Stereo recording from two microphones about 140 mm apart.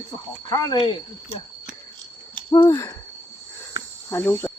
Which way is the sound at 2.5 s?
25° left (ahead or behind).